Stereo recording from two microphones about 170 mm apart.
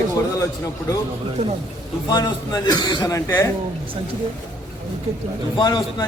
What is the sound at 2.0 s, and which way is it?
A man's voice, 25° left (ahead or behind).